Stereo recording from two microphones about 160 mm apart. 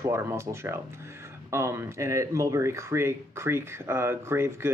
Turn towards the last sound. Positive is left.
turn(degrees=-15)  # may be behind; listen again after turning